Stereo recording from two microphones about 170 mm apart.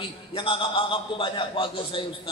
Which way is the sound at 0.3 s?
30° left (ahead or behind).